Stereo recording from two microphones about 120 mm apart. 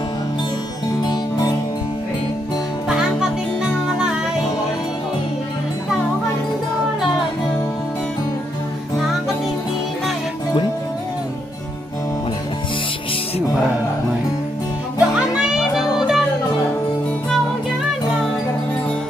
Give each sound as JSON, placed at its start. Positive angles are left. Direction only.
{"t": 0.8, "sound": "music", "side_deg": 35}
{"t": 15.0, "sound": "music", "side_deg": -5}